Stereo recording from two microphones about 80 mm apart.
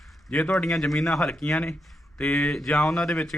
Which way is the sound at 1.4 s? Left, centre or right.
Centre.